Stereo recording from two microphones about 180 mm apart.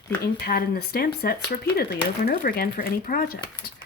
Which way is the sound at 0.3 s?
55° left (ahead or behind).